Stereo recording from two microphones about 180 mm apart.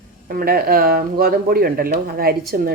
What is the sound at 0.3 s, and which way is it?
Speech, 55° right (ahead or behind).